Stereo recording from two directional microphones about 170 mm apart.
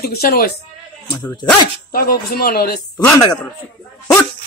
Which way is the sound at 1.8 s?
60° left (ahead or behind).